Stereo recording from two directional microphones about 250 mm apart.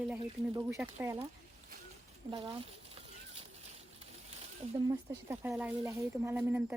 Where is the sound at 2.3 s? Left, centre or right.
Centre.